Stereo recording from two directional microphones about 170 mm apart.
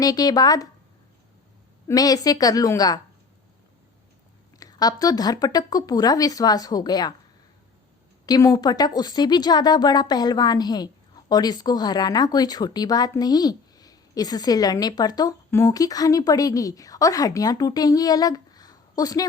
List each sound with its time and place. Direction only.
0.0 s a woman's voice: 20° left (ahead or behind)
1.9 s a woman's voice: 20° left (ahead or behind)
4.6 s a woman's voice: 20° left (ahead or behind)
8.3 s a woman's voice: 20° left (ahead or behind)